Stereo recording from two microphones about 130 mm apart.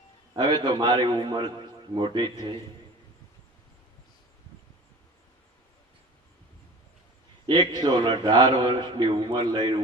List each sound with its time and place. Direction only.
0.3 s a man's voice: 35° right (ahead or behind)
7.4 s a man's voice: 35° right (ahead or behind)